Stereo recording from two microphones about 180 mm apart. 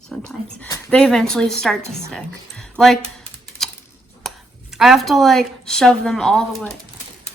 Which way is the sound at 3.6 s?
Centre (ahead or behind).